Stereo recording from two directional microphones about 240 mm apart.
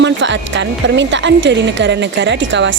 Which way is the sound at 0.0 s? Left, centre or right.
Right.